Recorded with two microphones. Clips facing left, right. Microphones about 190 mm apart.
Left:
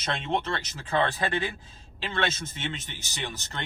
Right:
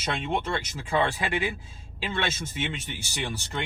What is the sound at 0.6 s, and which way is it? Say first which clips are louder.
A man's voice: right 1 dB; 10° right (ahead or behind).